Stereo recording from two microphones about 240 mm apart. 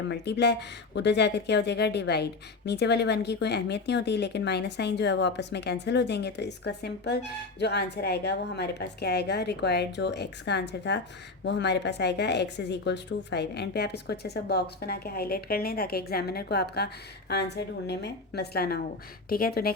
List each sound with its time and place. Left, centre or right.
0.1 s speech: left